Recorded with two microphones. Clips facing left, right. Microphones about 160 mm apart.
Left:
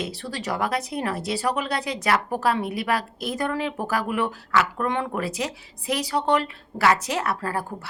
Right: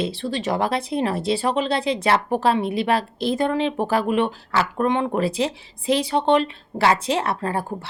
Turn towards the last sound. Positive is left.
turn(degrees=-25)  # may be behind; listen again after turning